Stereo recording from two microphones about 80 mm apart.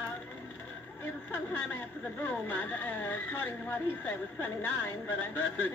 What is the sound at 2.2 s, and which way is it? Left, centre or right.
Speech, left.